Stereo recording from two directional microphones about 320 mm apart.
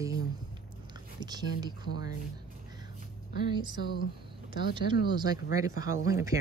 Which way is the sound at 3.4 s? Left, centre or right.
Centre.